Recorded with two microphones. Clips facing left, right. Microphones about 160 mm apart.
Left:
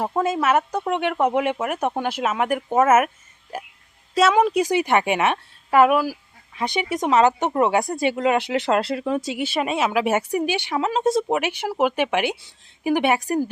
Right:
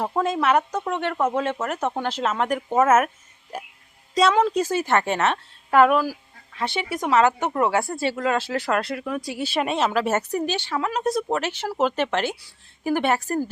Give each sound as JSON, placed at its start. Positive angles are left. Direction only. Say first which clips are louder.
{"t": 0.0, "sound": "speech", "louder": "left 1 dB", "side_deg": 5}
{"t": 4.1, "sound": "speech", "louder": "left 2 dB", "side_deg": 10}
{"t": 9.5, "sound": "speech", "louder": "right 1 dB", "side_deg": 10}
{"t": 11.3, "sound": "speech", "louder": "left 2 dB", "side_deg": 15}